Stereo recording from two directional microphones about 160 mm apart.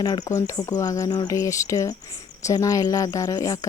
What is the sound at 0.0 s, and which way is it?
Speech, 25° left (ahead or behind).